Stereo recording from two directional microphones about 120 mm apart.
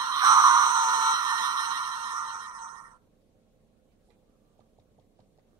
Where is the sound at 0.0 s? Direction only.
30° right (ahead or behind).